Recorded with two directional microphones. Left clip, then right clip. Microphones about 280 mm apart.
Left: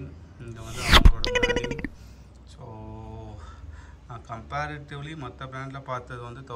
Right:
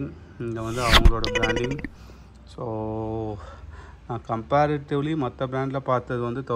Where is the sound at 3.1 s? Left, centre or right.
Centre.